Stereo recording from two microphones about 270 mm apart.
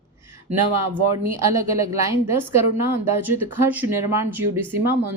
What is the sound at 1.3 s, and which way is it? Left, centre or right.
Speech, centre.